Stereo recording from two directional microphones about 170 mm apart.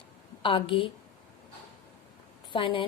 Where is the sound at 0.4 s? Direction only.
30° left (ahead or behind).